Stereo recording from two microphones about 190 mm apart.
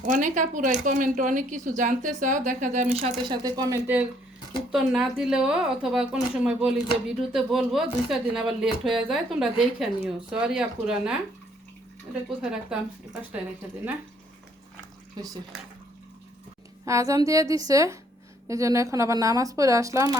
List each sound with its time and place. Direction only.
0.0 s a woman's voice: 40° right (ahead or behind)
3.2 s speech: 20° right (ahead or behind)
4.7 s speech: centre (ahead or behind)
12.4 s speech: 5° right (ahead or behind)
15.2 s speech: 20° right (ahead or behind)
16.8 s speech: 15° right (ahead or behind)